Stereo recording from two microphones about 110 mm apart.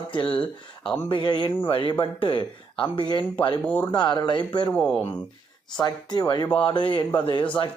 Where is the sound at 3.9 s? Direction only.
40° left (ahead or behind).